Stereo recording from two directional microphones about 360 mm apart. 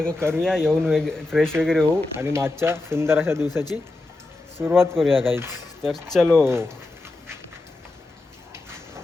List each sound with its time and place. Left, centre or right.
0.0 s speech: centre
4.5 s speech: centre